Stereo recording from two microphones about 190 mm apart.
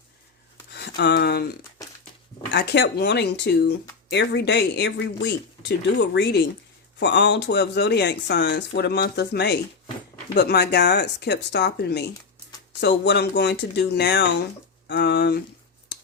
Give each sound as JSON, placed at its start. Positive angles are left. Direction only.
{"t": 0.7, "sound": "speech", "side_deg": 60}
{"t": 2.5, "sound": "speech", "side_deg": 65}